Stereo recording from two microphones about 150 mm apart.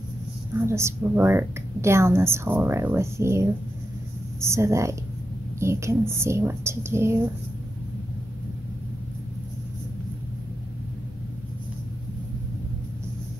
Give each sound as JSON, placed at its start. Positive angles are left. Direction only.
{"t": 0.7, "sound": "a woman's voice", "side_deg": -20}